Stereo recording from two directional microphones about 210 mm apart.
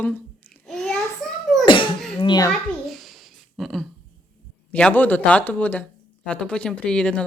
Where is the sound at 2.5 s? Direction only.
Centre (ahead or behind).